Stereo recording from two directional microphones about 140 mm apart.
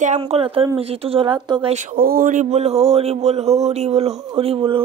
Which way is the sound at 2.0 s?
90° right.